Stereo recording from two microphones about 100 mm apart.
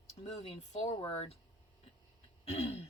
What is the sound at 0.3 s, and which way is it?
Speech, 80° left.